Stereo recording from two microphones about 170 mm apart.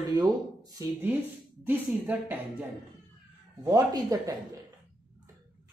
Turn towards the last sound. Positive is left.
turn(degrees=-20)  # may be behind; listen again after turning